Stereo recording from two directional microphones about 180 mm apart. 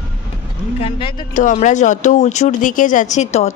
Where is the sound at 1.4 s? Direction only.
45° left (ahead or behind).